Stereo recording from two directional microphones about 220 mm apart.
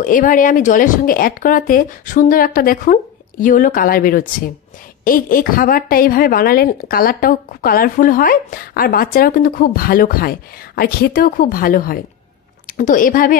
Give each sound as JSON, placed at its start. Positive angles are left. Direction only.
{"t": 0.0, "sound": "a woman's voice", "side_deg": 40}